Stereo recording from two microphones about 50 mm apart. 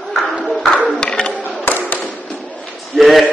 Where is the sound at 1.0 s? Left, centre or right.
Centre.